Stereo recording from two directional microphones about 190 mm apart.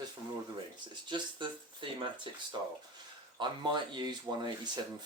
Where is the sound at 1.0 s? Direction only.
25° right (ahead or behind).